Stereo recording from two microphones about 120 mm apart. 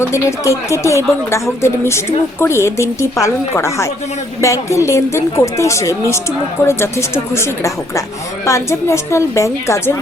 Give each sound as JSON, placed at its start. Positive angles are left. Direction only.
{"t": 0.0, "sound": "speech", "side_deg": 25}